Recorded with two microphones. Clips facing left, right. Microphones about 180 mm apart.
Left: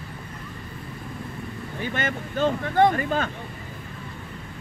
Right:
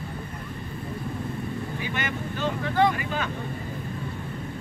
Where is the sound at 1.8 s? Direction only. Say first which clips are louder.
Left 6 dB; 50° left (ahead or behind).